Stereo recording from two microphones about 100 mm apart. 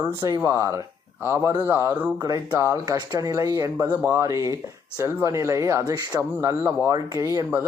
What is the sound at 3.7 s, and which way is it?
Speech, 20° right (ahead or behind).